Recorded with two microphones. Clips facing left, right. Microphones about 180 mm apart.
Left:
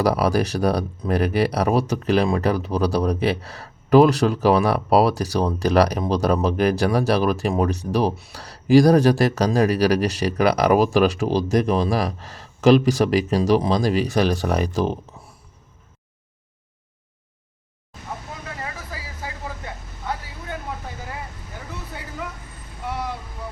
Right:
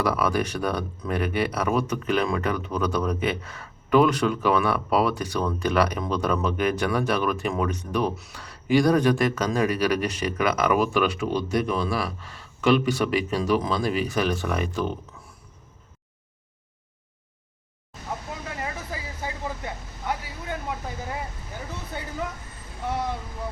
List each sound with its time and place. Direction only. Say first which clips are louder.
0.0 s speech: left 4 dB; 35° left (ahead or behind)
18.6 s vehicle: right 1 dB; 20° right (ahead or behind)